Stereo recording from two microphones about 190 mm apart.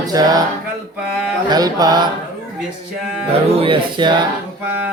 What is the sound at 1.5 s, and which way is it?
Speech, 20° right (ahead or behind).